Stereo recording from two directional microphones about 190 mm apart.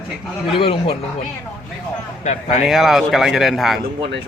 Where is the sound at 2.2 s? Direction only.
40° left (ahead or behind).